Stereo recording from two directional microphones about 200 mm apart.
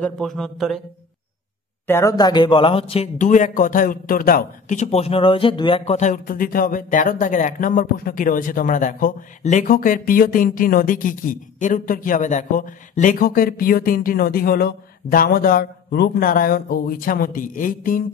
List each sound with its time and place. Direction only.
0.0 s speech: centre (ahead or behind)
1.9 s speech: 15° left (ahead or behind); by 18.0 s 45° left (ahead or behind)